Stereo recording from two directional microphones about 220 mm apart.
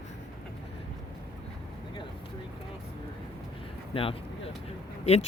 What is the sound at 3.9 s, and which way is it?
Speech, 25° left (ahead or behind).